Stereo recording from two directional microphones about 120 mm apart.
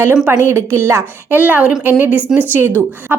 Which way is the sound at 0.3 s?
20° right (ahead or behind).